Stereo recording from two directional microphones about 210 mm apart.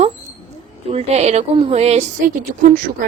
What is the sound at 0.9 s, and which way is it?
A woman's voice, 30° right (ahead or behind).